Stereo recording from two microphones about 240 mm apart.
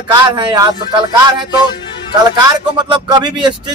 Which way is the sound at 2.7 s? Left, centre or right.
Centre.